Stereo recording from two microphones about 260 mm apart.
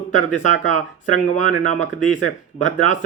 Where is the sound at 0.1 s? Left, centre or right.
Left.